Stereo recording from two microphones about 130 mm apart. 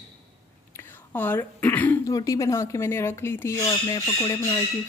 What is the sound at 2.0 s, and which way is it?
Speech, 25° left (ahead or behind).